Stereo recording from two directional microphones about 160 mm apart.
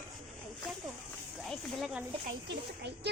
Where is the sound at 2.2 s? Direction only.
90° right.